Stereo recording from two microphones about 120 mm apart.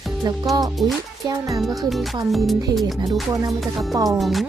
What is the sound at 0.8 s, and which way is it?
Speech, centre (ahead or behind).